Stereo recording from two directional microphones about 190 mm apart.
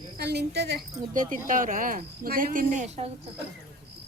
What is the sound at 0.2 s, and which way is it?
Speech, 60° right (ahead or behind).